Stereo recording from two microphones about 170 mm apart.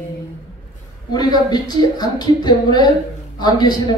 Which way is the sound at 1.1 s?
25° left (ahead or behind).